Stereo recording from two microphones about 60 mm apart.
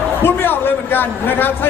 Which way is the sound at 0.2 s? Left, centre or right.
Left.